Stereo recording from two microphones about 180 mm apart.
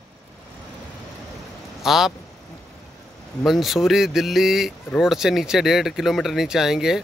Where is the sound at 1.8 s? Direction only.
Centre (ahead or behind).